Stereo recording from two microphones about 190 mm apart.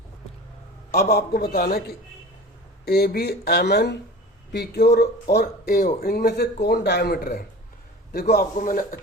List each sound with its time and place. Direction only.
0.9 s a man's voice: 55° left (ahead or behind)